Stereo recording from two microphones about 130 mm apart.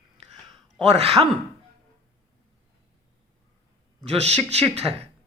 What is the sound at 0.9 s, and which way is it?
Speech, 50° right (ahead or behind).